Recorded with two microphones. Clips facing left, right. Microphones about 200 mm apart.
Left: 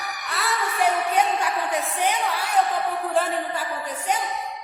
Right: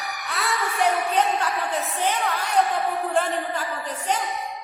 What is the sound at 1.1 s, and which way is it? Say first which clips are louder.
A woman's voice: even; 10° left (ahead or behind).